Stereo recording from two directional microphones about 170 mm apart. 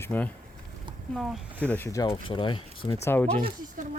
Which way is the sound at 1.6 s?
10° left (ahead or behind).